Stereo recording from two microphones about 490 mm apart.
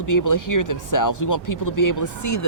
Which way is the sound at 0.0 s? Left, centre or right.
Left.